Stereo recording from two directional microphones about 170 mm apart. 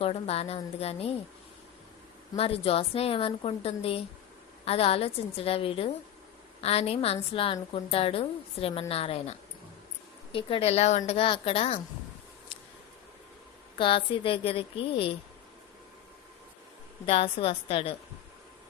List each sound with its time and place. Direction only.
0.0 s a woman's voice: 35° left (ahead or behind)
2.3 s a woman's voice: 35° left (ahead or behind)
10.3 s a woman's voice: 35° left (ahead or behind)
13.7 s a woman's voice: 30° left (ahead or behind)
17.1 s a woman's voice: 35° left (ahead or behind)